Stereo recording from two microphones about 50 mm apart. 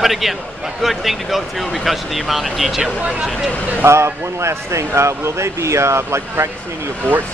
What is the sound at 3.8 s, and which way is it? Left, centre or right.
Speech, right.